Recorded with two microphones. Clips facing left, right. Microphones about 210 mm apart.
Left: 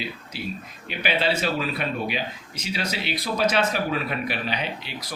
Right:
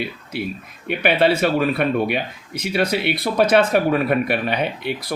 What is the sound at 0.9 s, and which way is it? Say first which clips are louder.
Speech: right 8 dB; 55° right (ahead or behind).